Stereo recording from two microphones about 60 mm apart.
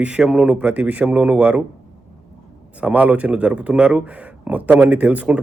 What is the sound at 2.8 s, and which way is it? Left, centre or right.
A man's voice, right.